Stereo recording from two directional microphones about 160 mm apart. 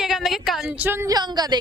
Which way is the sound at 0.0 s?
Centre (ahead or behind).